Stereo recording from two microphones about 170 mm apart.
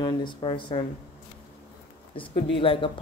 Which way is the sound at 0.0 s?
30° left (ahead or behind).